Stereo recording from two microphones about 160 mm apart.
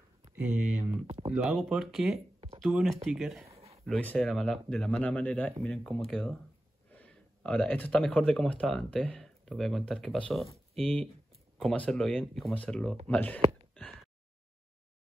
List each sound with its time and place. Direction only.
1.0 s speech: 35° right (ahead or behind)
1.3 s speech: centre (ahead or behind)
3.5 s a sound: 40° right (ahead or behind)
3.8 s speech: 10° left (ahead or behind)